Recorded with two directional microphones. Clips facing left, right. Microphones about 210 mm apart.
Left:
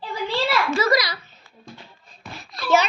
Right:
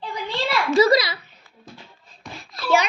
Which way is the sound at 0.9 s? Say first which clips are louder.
Right 3 dB; 25° right (ahead or behind).